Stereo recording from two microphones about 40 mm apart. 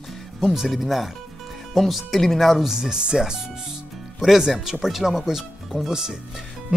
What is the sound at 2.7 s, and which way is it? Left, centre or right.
Speech, centre.